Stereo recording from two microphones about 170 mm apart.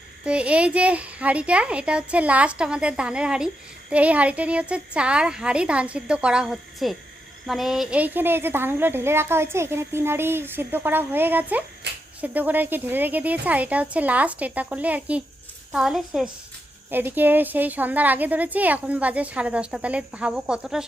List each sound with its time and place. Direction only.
0.3 s a child's voice: 5° right (ahead or behind)
11.8 s a sound: 80° right
12.2 s a child's voice: 10° right (ahead or behind)